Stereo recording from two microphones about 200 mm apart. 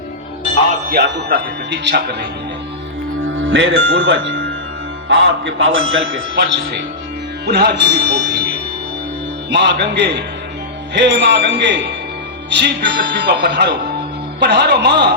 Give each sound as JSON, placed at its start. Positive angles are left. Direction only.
{"t": 0.9, "sound": "speech", "side_deg": -55}
{"t": 3.4, "sound": "a man's voice", "side_deg": -60}
{"t": 7.4, "sound": "speech", "side_deg": -55}
{"t": 9.5, "sound": "speech", "side_deg": -60}